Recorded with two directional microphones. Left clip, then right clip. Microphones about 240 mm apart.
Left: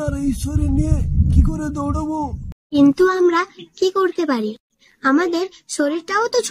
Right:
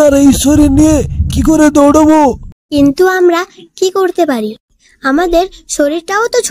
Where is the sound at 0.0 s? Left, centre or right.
Right.